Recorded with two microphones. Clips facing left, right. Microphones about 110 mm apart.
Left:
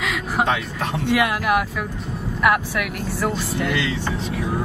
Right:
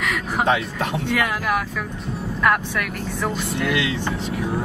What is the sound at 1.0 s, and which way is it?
Speech, 10° left (ahead or behind).